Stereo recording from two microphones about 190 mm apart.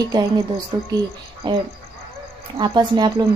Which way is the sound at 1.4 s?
25° right (ahead or behind).